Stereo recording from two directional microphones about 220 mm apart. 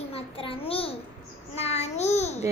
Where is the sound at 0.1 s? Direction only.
25° left (ahead or behind).